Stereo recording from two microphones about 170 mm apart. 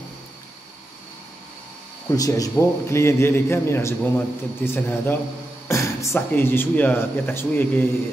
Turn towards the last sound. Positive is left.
turn(degrees=15)  # may be behind; listen again after turning